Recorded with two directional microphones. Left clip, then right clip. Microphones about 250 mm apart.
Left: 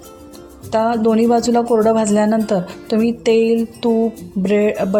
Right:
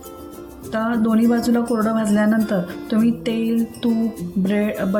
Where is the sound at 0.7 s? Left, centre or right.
Left.